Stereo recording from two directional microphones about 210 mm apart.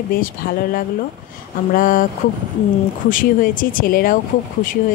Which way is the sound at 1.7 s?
40° left (ahead or behind).